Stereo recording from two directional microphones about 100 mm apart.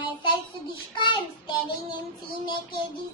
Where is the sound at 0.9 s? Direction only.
55° left (ahead or behind).